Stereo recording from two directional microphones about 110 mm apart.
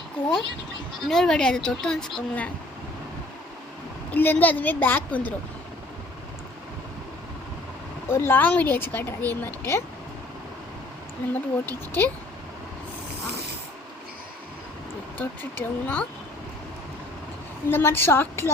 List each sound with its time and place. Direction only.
1.0 s a woman's voice: 5° left (ahead or behind)
4.1 s a woman's voice: 15° left (ahead or behind)
8.1 s a woman's voice: 20° left (ahead or behind)
11.3 s a woman's voice: 20° left (ahead or behind)
15.2 s a woman's voice: 15° left (ahead or behind)
17.7 s a woman's voice: 20° left (ahead or behind)